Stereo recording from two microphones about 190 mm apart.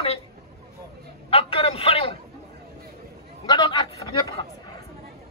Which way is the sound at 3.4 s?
20° left (ahead or behind).